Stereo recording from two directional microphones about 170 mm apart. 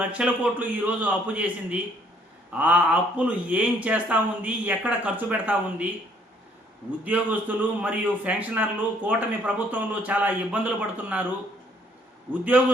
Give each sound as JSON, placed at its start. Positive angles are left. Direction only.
{"t": 0.0, "sound": "a man's voice", "side_deg": -10}
{"t": 7.0, "sound": "a man's voice", "side_deg": -10}
{"t": 12.3, "sound": "a man's voice", "side_deg": -10}